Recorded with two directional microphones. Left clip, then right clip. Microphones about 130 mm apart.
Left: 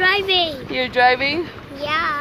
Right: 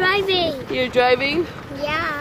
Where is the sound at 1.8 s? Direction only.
15° left (ahead or behind).